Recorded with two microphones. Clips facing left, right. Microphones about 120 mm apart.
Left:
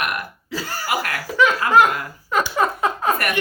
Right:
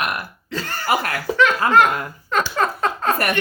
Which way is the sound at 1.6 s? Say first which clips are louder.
Even; 35° right (ahead or behind).